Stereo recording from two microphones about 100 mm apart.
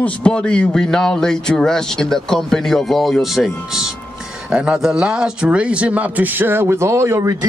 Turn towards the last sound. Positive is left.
turn(degrees=-30)  # may be behind; listen again after turning